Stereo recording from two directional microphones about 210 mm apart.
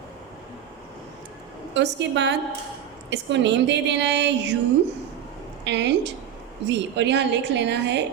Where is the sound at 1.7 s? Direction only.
55° right (ahead or behind).